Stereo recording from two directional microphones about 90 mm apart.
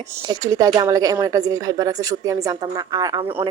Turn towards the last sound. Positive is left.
turn(degrees=-45)  # may be behind; listen again after turning